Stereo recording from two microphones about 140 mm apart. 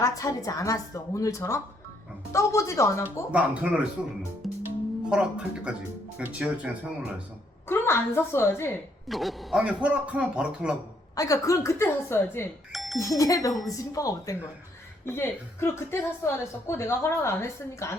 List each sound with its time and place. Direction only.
0.0 s a woman's voice: 25° left (ahead or behind)
3.3 s a man's voice: 10° right (ahead or behind)
4.4 s music: centre (ahead or behind)
5.0 s a man's voice: 10° right (ahead or behind)
7.7 s a woman's voice: 15° left (ahead or behind)
9.0 s a man's voice: centre (ahead or behind)
11.1 s a woman's voice: 25° left (ahead or behind)
12.7 s music: centre (ahead or behind)
13.0 s a woman's voice: 25° left (ahead or behind)